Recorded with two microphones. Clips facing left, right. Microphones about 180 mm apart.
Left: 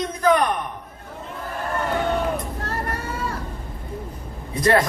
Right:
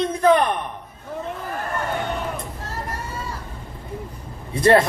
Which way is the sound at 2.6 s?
60° left (ahead or behind).